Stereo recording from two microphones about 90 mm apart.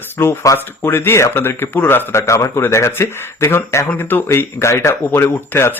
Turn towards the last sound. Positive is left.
turn(degrees=25)  # may be behind; listen again after turning